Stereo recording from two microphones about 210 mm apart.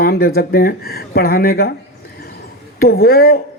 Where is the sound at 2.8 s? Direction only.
45° left (ahead or behind).